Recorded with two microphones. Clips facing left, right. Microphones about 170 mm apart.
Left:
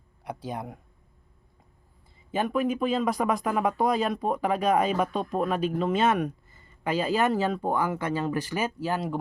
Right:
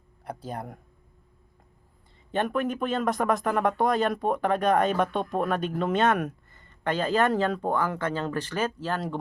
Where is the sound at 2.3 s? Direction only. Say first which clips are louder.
Left 1 dB; 5° left (ahead or behind).